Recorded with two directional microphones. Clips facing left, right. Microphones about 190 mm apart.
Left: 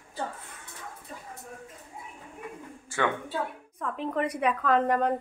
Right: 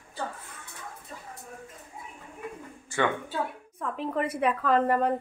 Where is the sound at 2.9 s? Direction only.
5° left (ahead or behind).